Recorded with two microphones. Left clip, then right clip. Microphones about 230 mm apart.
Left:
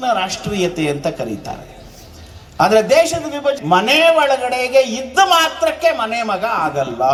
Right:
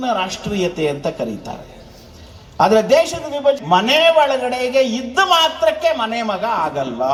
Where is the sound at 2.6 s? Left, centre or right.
Left.